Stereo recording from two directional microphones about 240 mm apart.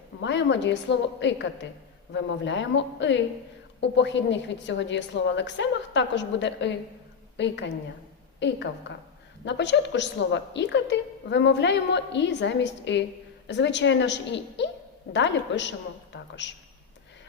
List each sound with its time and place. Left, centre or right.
0.2 s a woman's voice: left